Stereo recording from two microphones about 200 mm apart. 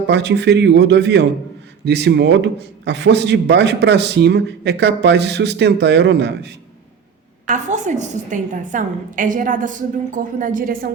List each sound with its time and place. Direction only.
0.1 s a man's voice: 60° right (ahead or behind)
7.4 s a woman's voice: 35° right (ahead or behind)